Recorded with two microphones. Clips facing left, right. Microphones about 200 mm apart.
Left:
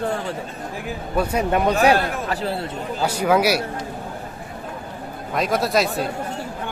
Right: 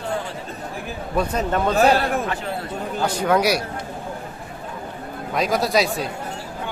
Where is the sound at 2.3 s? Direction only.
35° left (ahead or behind).